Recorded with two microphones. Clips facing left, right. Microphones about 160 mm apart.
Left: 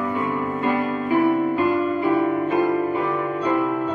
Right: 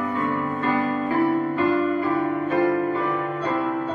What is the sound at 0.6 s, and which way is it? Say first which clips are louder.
Music: even; 15° left (ahead or behind).